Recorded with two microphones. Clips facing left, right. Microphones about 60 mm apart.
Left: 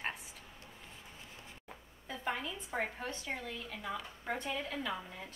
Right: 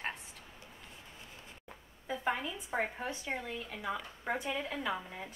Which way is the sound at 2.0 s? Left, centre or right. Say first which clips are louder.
Right 4 dB; centre.